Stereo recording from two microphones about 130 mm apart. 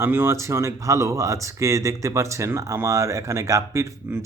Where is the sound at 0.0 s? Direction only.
15° right (ahead or behind).